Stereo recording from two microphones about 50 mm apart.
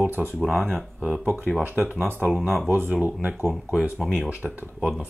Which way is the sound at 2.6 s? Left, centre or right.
Right.